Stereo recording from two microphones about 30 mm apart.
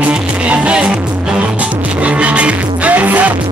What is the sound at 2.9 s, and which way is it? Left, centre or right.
Music, right.